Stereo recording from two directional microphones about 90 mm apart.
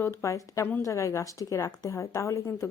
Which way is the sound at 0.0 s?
30° left (ahead or behind).